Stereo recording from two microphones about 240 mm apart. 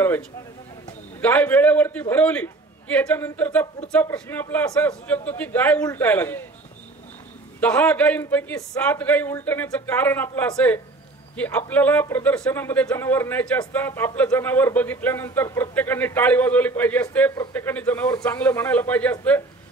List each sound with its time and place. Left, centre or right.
1.2 s speech: centre
7.6 s speech: centre